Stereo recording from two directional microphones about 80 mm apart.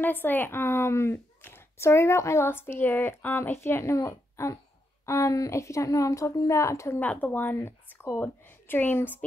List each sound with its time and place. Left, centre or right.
0.0 s speech: left
7.0 s speech: centre